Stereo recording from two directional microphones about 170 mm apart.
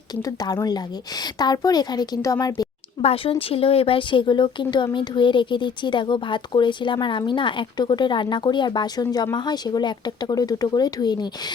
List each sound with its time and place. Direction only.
0.2 s speech: 20° left (ahead or behind)
3.0 s speech: 35° left (ahead or behind)